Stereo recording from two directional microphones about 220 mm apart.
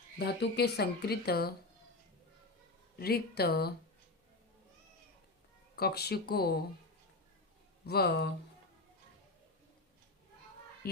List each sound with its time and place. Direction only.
0.2 s speech: 50° left (ahead or behind)
3.0 s speech: 45° left (ahead or behind)
5.7 s speech: 45° left (ahead or behind)
7.9 s speech: 45° left (ahead or behind)